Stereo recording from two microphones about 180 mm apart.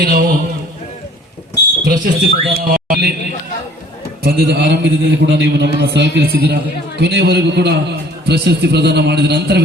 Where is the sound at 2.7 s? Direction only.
60° right (ahead or behind).